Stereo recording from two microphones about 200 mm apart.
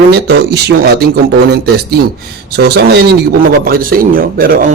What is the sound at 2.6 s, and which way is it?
Speech, 55° right (ahead or behind).